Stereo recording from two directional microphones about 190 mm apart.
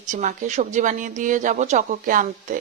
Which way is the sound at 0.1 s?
40° right (ahead or behind).